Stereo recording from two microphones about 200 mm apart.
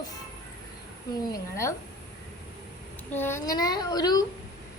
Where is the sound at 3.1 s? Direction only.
10° left (ahead or behind).